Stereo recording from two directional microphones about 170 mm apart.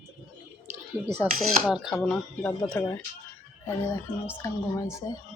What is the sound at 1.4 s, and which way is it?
Speech, 5° right (ahead or behind).